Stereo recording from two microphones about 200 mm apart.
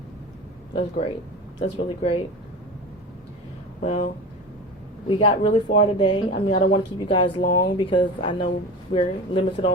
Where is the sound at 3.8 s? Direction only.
35° left (ahead or behind).